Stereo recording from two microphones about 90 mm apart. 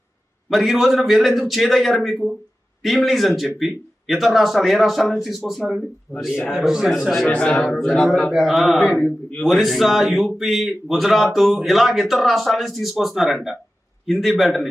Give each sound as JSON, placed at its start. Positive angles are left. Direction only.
{"t": 0.5, "sound": "a man's voice", "side_deg": 0}
{"t": 7.3, "sound": "a man's voice", "side_deg": 10}
{"t": 9.0, "sound": "a man's voice", "side_deg": 20}
{"t": 9.4, "sound": "a man's voice", "side_deg": 0}